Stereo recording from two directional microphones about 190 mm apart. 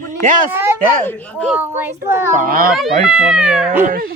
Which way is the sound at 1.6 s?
10° right (ahead or behind).